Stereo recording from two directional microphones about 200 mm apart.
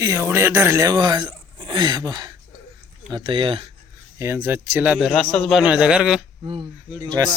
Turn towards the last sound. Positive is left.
turn(degrees=-15)  # may be behind; listen again after turning